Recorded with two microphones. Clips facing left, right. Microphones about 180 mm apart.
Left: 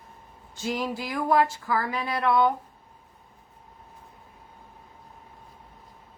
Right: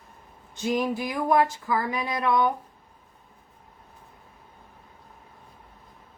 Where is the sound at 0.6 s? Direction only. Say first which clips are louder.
Right 4 dB; 20° right (ahead or behind).